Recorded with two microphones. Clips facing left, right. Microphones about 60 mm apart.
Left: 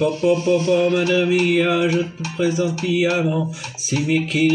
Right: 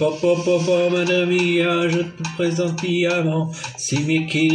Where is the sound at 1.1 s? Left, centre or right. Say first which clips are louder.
Left 1 dB; centre.